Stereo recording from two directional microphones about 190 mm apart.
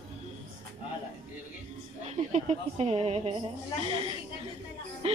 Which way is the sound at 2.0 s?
35° right (ahead or behind).